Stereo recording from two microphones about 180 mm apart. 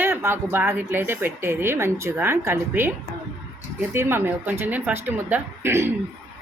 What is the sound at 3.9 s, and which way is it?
A woman's voice, 15° right (ahead or behind).